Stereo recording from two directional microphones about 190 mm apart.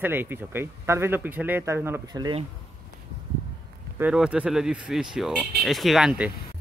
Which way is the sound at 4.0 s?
5° right (ahead or behind).